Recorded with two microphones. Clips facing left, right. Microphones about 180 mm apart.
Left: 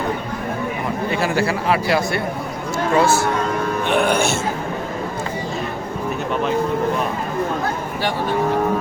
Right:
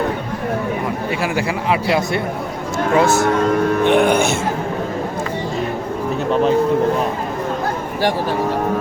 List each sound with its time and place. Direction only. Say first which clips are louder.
1.2 s a man's voice: left 2 dB; 15° right (ahead or behind)